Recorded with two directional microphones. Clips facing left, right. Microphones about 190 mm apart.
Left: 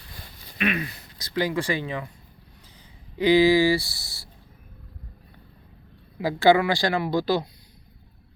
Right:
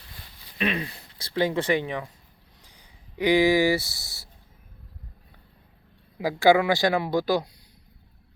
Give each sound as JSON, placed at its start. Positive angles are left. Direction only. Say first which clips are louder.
{"t": 0.6, "sound": "speech", "louder": "left 1 dB", "side_deg": -30}
{"t": 6.1, "sound": "speech", "louder": "even", "side_deg": -15}